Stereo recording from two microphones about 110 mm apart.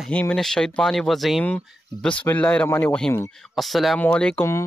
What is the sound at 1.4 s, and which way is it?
Speech, 10° left (ahead or behind).